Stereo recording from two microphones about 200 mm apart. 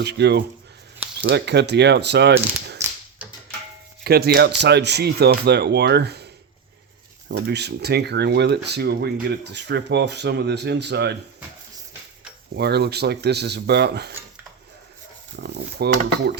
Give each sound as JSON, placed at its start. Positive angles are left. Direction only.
{"t": 0.0, "sound": "speech", "side_deg": -55}
{"t": 3.2, "sound": "music", "side_deg": -5}
{"t": 4.0, "sound": "speech", "side_deg": -50}
{"t": 7.3, "sound": "speech", "side_deg": -55}
{"t": 12.5, "sound": "speech", "side_deg": -55}
{"t": 15.4, "sound": "speech", "side_deg": -55}